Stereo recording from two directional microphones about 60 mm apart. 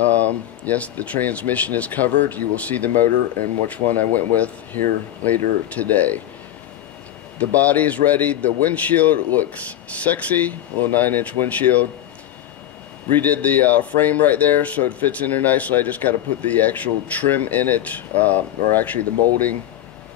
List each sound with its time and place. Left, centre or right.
0.0 s speech: left
7.3 s speech: left
13.1 s speech: left